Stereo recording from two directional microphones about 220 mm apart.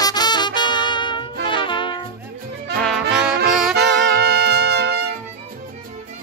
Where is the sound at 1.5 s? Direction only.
20° left (ahead or behind).